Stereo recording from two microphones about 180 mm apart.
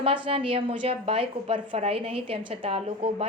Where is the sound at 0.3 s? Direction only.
30° right (ahead or behind).